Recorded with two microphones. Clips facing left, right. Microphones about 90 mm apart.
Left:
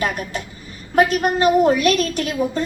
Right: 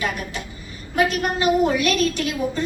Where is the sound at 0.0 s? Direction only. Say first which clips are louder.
Left 3 dB; 45° left (ahead or behind).